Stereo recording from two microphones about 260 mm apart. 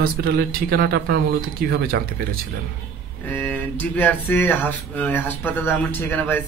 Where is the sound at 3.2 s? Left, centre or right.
Centre.